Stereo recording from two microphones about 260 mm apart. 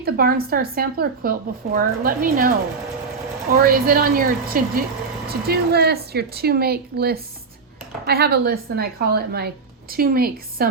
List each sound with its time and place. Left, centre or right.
0.0 s speech: right
3.6 s speech: right